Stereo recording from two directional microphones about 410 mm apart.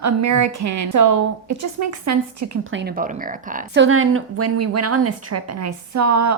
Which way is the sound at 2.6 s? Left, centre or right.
Right.